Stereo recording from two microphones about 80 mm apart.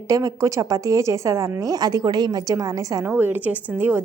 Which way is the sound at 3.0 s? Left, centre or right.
Right.